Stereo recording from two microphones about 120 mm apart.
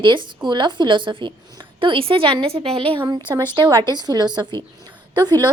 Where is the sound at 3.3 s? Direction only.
35° right (ahead or behind).